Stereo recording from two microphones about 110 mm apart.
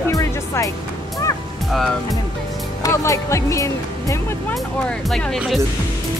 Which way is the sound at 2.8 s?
30° left (ahead or behind).